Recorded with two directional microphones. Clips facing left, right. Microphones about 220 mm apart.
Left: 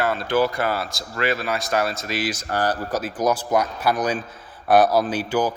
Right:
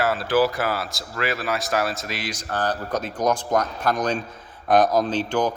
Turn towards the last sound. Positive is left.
turn(degrees=5)  # may be behind; listen again after turning